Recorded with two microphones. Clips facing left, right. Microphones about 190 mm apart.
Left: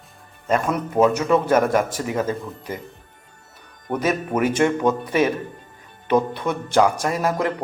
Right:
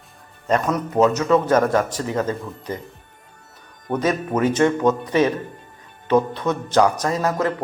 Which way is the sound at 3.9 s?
10° left (ahead or behind).